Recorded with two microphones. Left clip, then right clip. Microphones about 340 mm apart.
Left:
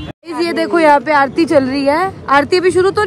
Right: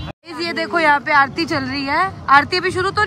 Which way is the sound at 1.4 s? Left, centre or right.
Centre.